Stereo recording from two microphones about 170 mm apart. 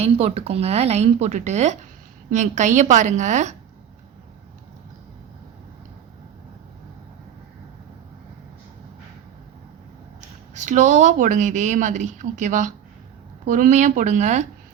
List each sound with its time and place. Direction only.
0.0 s a woman's voice: 35° right (ahead or behind)
10.5 s a woman's voice: 45° right (ahead or behind)